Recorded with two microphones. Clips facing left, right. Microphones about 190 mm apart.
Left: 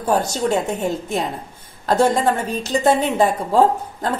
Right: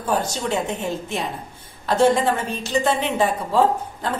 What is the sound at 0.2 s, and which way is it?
A woman's voice, 40° left (ahead or behind).